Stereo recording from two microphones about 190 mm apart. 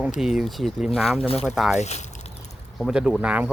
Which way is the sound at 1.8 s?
35° left (ahead or behind).